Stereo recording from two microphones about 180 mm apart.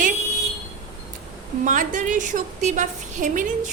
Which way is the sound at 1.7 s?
45° right (ahead or behind).